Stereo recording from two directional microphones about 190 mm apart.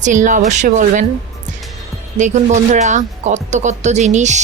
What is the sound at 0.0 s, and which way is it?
Speech, 40° right (ahead or behind).